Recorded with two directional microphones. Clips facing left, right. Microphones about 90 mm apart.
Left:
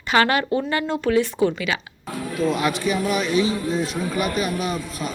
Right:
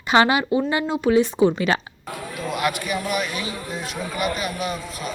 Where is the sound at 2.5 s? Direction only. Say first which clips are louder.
Even; 25° left (ahead or behind).